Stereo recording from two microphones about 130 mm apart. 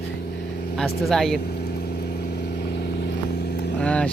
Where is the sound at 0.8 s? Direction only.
5° left (ahead or behind).